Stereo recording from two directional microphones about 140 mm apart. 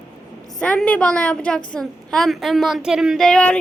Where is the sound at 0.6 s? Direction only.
10° left (ahead or behind).